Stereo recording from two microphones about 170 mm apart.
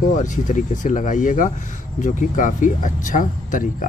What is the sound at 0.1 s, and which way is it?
A man's voice, 50° left (ahead or behind).